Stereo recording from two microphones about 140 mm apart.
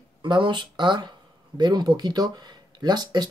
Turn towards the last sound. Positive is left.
turn(degrees=-30)  # may be behind; listen again after turning